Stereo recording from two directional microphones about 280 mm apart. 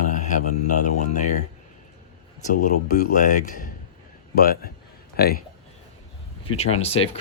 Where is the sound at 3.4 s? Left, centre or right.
Left.